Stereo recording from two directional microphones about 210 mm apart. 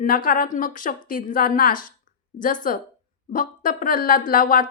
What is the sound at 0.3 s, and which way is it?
Speech, 40° left (ahead or behind).